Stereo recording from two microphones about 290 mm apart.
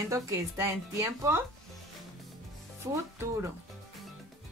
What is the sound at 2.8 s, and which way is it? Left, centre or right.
Speech, centre.